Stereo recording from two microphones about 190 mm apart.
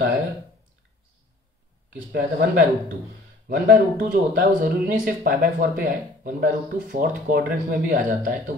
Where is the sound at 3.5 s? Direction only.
45° right (ahead or behind).